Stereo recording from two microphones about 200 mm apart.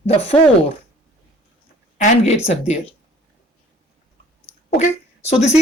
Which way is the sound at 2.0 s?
30° left (ahead or behind).